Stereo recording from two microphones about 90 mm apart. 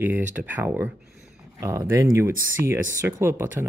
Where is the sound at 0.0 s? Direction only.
20° right (ahead or behind).